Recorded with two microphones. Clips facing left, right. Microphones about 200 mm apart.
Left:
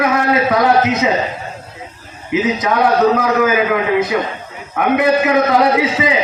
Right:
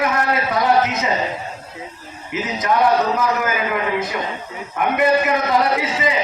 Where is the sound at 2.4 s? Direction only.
85° left.